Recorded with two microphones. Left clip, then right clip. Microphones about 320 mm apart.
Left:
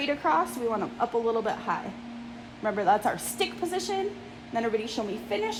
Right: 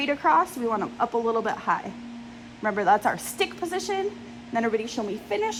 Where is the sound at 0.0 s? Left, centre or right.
Right.